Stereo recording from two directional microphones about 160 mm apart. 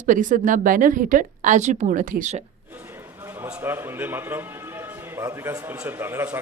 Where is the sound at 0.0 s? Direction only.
55° right (ahead or behind).